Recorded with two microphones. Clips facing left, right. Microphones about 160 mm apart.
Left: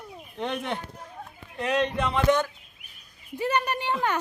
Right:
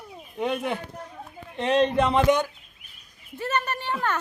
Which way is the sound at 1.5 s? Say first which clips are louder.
Right 5 dB; 30° right (ahead or behind).